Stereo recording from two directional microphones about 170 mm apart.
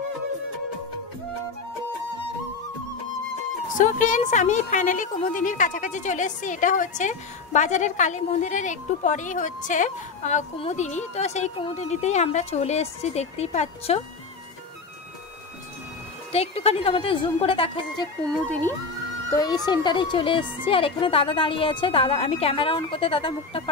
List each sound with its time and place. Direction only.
3.7 s a woman's voice: 50° left (ahead or behind)
16.3 s a woman's voice: 35° left (ahead or behind)
19.3 s a woman's voice: 25° left (ahead or behind)